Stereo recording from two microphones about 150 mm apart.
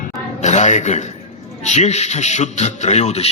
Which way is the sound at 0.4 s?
50° left (ahead or behind).